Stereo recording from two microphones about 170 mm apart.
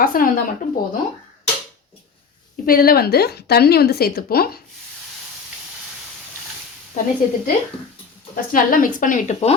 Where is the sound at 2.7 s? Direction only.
60° left (ahead or behind).